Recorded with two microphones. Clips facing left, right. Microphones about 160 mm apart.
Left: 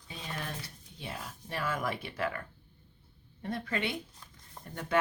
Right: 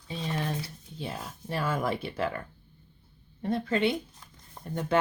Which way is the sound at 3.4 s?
30° right (ahead or behind).